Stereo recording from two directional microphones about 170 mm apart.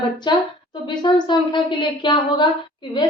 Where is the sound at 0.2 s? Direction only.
25° left (ahead or behind).